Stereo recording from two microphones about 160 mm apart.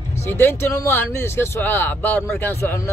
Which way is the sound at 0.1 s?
15° left (ahead or behind).